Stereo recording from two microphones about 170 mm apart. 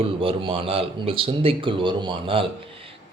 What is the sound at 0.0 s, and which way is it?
Speech, 30° right (ahead or behind).